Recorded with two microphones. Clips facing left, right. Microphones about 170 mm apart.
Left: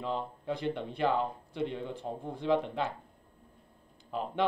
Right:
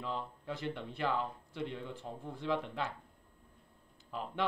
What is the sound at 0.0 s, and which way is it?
Speech, 20° left (ahead or behind).